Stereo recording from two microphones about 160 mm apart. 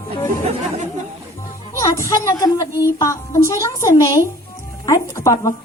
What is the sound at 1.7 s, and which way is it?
Speech, 20° left (ahead or behind).